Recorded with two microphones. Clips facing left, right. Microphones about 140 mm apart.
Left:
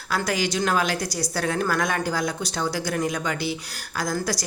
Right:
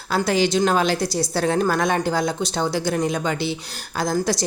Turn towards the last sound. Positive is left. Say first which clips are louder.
# right 5 dB
turn(degrees=-25)  # may be behind; listen again after turning